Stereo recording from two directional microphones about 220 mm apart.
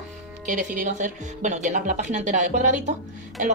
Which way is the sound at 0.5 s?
35° right (ahead or behind).